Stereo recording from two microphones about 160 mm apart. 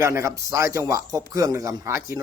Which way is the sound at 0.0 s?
15° right (ahead or behind).